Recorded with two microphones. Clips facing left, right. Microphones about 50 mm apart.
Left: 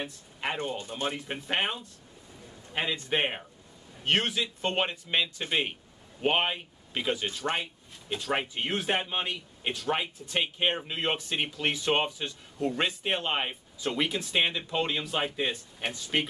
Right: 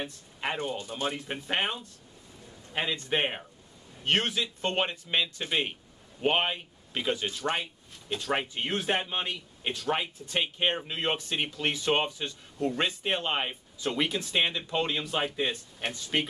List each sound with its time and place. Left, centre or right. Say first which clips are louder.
0.0 s speech: even; centre
0.7 s speech: even; left
1.0 s speech: even; centre